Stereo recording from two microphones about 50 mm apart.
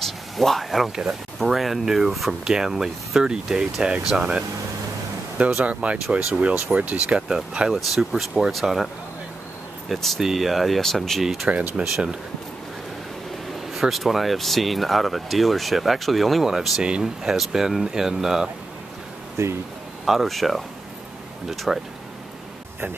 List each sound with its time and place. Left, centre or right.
0.0 s a sound: centre
1.4 s speech: centre
5.6 s speech: right
7.7 s speech: centre
9.9 s speech: centre
11.2 s speech: centre
11.8 s speech: right
13.7 s speech: centre
16.8 s speech: centre
17.2 s speech: centre
19.4 s speech: right
20.1 s speech: centre
21.7 s speech: centre